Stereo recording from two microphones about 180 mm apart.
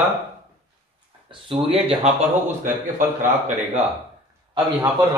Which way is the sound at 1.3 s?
30° right (ahead or behind).